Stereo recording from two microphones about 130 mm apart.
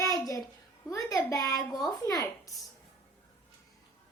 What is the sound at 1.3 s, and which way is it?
A woman's voice, 30° left (ahead or behind).